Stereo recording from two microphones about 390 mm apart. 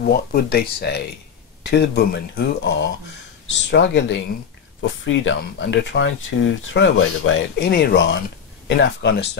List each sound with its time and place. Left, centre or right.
0.0 s speech: left